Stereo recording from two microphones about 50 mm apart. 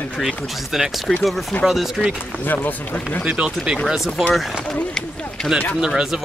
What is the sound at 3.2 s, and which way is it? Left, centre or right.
Speech, right.